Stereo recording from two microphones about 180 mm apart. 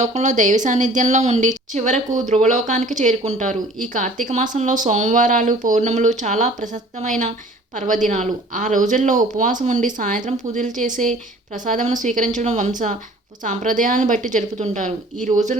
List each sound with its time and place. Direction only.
0.0 s speech: 40° right (ahead or behind)